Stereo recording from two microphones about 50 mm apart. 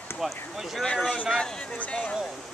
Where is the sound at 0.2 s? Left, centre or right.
Centre.